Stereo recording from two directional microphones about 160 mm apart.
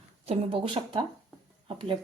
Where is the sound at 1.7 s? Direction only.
30° right (ahead or behind).